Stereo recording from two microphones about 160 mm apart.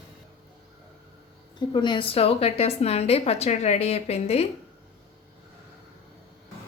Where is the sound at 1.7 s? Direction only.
30° left (ahead or behind).